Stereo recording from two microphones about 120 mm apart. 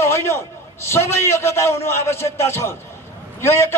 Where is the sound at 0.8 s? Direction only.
20° left (ahead or behind).